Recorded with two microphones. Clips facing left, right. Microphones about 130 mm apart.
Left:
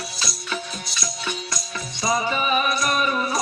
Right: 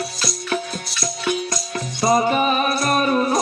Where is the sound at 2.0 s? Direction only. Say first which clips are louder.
Right 6 dB; 55° right (ahead or behind).